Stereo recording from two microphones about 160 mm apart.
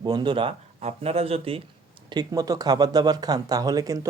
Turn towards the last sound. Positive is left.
turn(degrees=-20)  # may be behind; listen again after turning